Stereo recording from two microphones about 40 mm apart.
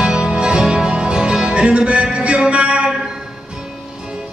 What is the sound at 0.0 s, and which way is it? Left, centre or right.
Music, right.